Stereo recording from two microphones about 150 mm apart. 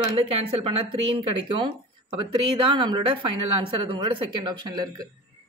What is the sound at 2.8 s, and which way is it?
A woman's voice, 30° right (ahead or behind).